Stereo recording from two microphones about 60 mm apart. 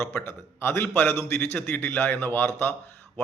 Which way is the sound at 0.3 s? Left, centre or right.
Left.